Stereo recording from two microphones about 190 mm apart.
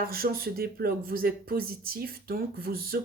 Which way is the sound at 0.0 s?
50° right (ahead or behind).